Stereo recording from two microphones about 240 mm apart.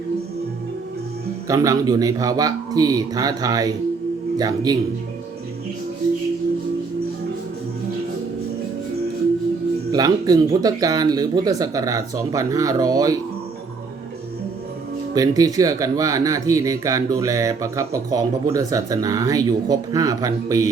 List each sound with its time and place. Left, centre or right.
1.5 s speech: centre
9.9 s speech: centre
15.1 s speech: centre